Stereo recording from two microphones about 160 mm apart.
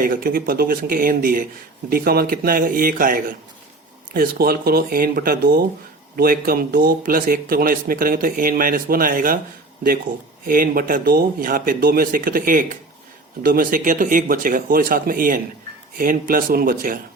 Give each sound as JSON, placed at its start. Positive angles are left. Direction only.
{"t": 0.0, "sound": "speech", "side_deg": -65}
{"t": 10.4, "sound": "speech", "side_deg": -60}